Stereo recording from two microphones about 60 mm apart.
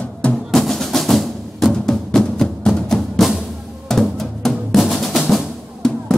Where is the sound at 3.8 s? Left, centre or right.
Centre.